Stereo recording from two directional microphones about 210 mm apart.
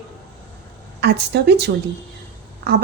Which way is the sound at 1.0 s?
55° right (ahead or behind).